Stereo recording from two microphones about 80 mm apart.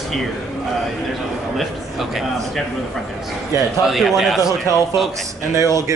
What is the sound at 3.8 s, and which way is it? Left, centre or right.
Speech, centre.